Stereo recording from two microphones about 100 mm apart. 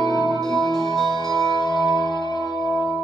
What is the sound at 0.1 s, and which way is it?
Music, 45° left (ahead or behind).